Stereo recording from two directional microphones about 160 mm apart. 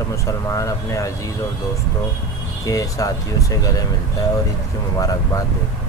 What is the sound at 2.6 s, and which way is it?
Speech, 20° left (ahead or behind).